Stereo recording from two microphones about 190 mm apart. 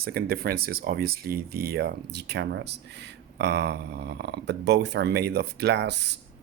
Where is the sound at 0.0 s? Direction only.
55° right (ahead or behind).